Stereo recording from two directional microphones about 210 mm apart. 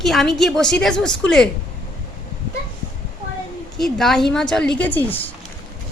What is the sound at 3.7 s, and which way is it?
A woman's voice, centre (ahead or behind).